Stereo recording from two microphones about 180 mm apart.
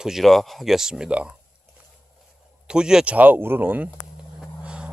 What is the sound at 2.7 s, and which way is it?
Speech, 5° right (ahead or behind).